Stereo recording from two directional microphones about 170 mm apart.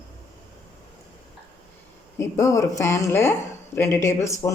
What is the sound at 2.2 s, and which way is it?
Speech, 20° left (ahead or behind).